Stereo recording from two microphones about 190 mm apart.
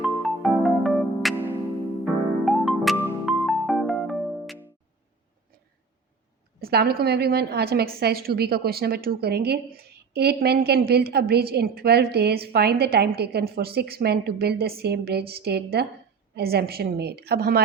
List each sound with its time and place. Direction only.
0.0 s music: centre (ahead or behind)
2.4 s music: centre (ahead or behind)
6.6 s a woman's voice: 55° right (ahead or behind)